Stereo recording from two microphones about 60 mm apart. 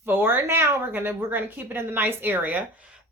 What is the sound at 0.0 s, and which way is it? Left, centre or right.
A woman's voice, right.